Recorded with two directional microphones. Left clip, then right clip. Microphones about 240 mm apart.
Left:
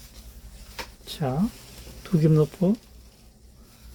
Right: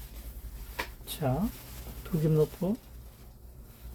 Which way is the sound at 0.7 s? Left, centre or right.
Left.